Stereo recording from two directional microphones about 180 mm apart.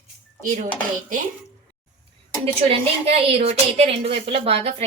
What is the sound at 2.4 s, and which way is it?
A woman's voice, 35° right (ahead or behind).